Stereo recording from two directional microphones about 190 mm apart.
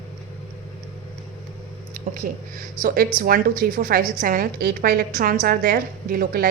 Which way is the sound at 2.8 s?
45° right (ahead or behind).